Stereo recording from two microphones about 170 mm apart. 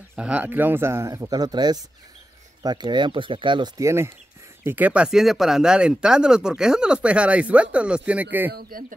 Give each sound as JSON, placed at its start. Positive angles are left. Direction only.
{"t": 0.1, "sound": "speech", "side_deg": -5}
{"t": 8.5, "sound": "speech", "side_deg": -60}